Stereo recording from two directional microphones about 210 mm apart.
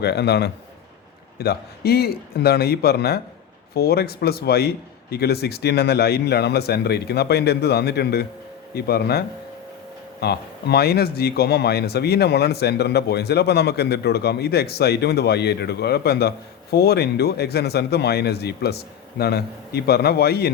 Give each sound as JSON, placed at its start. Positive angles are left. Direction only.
{"t": 0.0, "sound": "a man's voice", "side_deg": 50}